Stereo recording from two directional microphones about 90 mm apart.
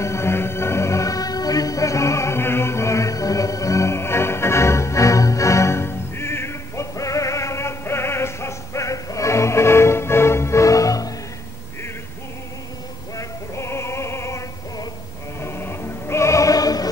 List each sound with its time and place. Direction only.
0.0 s music: 30° left (ahead or behind)
13.2 s music: 30° left (ahead or behind)